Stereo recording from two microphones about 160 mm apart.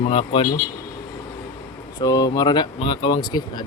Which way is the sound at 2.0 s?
25° left (ahead or behind).